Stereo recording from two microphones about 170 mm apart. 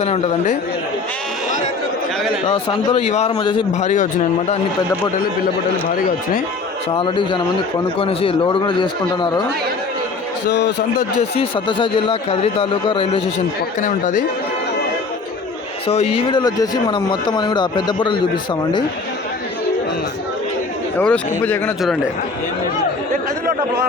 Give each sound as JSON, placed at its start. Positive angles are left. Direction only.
{"t": 0.0, "sound": "speech", "side_deg": 40}
{"t": 2.5, "sound": "speech", "side_deg": 35}
{"t": 3.3, "sound": "speech", "side_deg": 30}
{"t": 3.7, "sound": "a man's voice", "side_deg": 45}
{"t": 6.9, "sound": "speech", "side_deg": 30}
{"t": 10.5, "sound": "speech", "side_deg": 85}
{"t": 11.2, "sound": "speech", "side_deg": 30}
{"t": 15.9, "sound": "speech", "side_deg": 35}
{"t": 21.0, "sound": "speech", "side_deg": 10}